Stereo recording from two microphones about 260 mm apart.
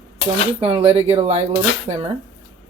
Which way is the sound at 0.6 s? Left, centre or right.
Right.